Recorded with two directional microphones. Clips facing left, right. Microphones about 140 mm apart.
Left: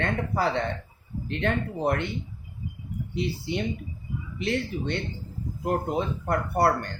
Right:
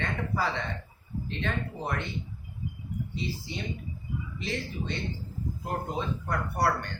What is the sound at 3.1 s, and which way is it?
Speech, 65° left (ahead or behind).